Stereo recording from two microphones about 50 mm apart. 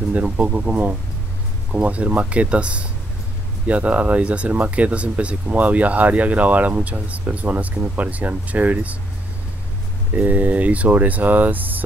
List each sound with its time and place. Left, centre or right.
0.1 s speech: right
10.1 s speech: right